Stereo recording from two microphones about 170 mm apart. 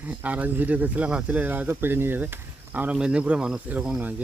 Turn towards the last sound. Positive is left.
turn(degrees=-5)  # may be behind; listen again after turning